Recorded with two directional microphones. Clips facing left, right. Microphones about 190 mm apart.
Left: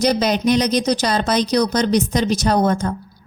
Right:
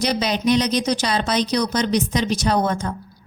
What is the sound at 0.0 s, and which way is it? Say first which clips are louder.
Speech: left 4 dB; 45° left (ahead or behind).